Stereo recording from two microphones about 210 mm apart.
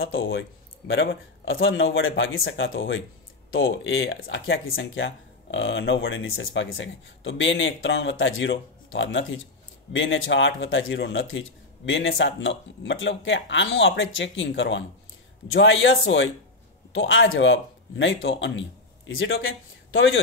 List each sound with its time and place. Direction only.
0.0 s speech: 70° left (ahead or behind)
1.4 s speech: 70° left (ahead or behind)